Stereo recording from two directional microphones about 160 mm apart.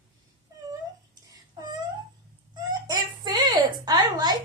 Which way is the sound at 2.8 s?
25° right (ahead or behind).